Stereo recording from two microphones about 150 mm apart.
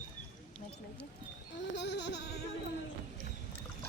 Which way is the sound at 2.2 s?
90° left.